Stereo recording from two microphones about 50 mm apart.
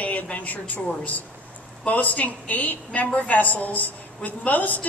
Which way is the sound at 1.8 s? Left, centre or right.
Left.